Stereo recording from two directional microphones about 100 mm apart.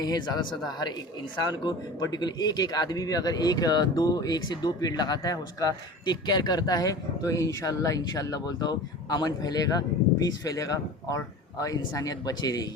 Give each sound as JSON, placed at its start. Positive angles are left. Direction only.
{"t": 0.0, "sound": "speech", "side_deg": 45}